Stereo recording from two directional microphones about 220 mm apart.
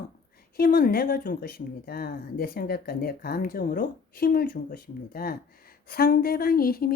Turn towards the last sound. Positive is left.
turn(degrees=40)  # may be behind; listen again after turning